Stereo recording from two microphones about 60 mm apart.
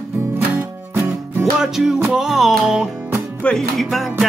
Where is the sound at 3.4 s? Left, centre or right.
Centre.